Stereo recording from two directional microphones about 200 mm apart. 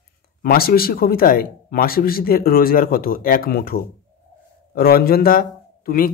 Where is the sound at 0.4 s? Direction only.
50° left (ahead or behind).